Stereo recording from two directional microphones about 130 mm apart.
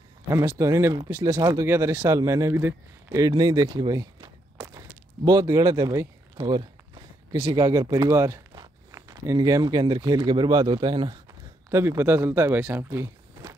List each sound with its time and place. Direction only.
0.3 s speech: 20° right (ahead or behind)
11.7 s speech: 20° right (ahead or behind)